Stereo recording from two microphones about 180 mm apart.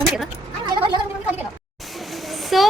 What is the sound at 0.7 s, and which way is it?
Gargling, 25° right (ahead or behind).